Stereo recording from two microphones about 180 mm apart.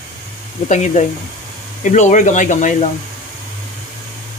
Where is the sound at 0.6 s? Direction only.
40° left (ahead or behind).